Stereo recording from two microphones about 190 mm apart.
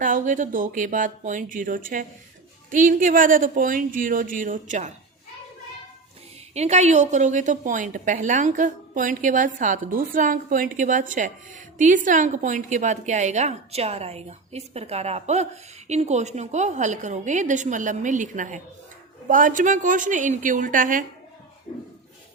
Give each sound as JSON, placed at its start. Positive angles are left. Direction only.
{"t": 0.0, "sound": "a woman's voice", "side_deg": -40}
{"t": 6.5, "sound": "a woman's voice", "side_deg": -35}